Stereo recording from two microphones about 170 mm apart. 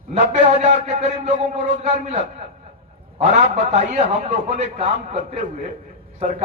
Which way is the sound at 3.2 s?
45° right (ahead or behind).